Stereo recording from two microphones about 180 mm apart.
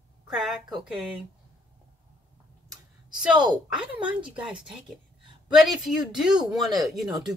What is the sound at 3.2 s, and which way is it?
A woman's voice, 5° right (ahead or behind).